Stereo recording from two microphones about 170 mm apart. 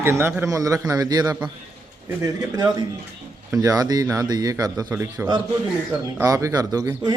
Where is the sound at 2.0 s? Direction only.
10° right (ahead or behind).